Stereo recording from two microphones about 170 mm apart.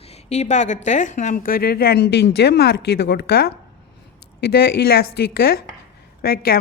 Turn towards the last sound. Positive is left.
turn(degrees=65)  # may be behind; listen again after turning